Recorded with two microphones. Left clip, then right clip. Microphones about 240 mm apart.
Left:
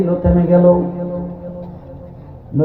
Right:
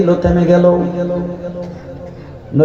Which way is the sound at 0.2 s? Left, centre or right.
Right.